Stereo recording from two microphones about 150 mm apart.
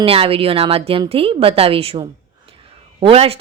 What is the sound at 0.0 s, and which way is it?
Speech, 40° right (ahead or behind).